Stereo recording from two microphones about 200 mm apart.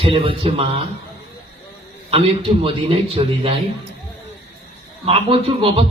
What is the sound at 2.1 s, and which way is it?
A man's voice, 30° right (ahead or behind).